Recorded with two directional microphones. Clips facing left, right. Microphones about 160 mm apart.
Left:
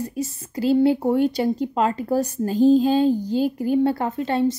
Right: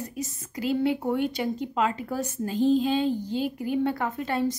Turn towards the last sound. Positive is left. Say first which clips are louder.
# left 5 dB
turn(degrees=25)  # may be behind; listen again after turning